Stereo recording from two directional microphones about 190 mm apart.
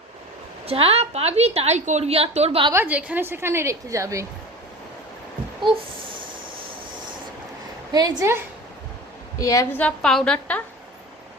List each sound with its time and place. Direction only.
0.6 s a woman's voice: 30° right (ahead or behind)
2.7 s a woman's voice: 10° right (ahead or behind)
5.6 s a sound: 25° right (ahead or behind)
7.9 s a woman's voice: 15° right (ahead or behind)
9.4 s a woman's voice: 20° left (ahead or behind)
9.8 s a woman's voice: 5° left (ahead or behind)